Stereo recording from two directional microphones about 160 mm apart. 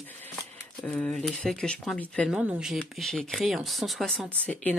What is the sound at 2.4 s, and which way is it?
Speech, 5° right (ahead or behind).